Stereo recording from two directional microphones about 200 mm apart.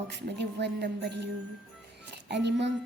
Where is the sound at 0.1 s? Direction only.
60° right (ahead or behind).